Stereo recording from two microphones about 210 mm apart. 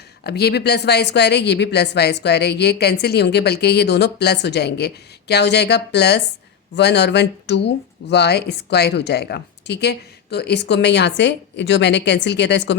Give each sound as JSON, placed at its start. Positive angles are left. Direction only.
{"t": 0.3, "sound": "speech", "side_deg": 50}